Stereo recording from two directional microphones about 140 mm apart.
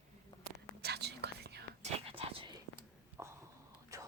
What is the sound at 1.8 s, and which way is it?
Whispering, 40° right (ahead or behind).